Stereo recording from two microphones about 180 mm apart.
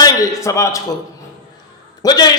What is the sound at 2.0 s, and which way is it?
Speech, 20° left (ahead or behind).